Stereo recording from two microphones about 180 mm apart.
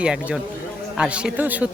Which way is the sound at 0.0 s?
5° right (ahead or behind).